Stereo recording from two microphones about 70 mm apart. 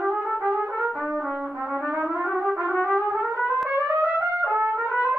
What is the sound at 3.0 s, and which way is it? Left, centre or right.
Music, right.